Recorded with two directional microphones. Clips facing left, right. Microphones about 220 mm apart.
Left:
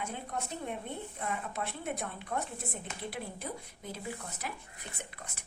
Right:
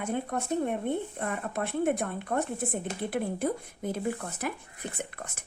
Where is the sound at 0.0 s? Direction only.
50° right (ahead or behind).